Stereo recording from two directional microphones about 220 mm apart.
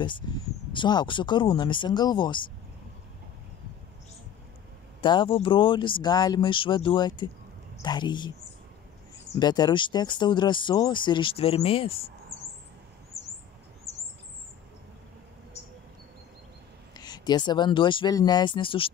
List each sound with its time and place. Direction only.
0.2 s speech: 20° left (ahead or behind)
5.0 s speech: 20° left (ahead or behind)
9.4 s speech: 20° left (ahead or behind)
13.9 s bird: 15° left (ahead or behind)
16.9 s speech: 20° left (ahead or behind)